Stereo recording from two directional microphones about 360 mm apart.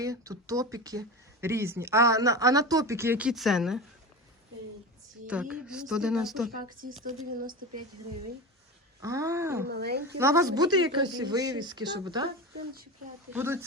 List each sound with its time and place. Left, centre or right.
0.0 s speech: centre
5.3 s speech: centre
6.6 s speech: right
9.0 s speech: centre
9.6 s speech: right
10.2 s speech: centre
13.3 s speech: centre